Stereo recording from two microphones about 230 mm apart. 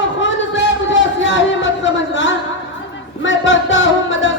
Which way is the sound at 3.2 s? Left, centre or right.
Left.